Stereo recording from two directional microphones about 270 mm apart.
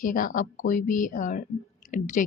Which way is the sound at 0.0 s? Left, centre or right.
Left.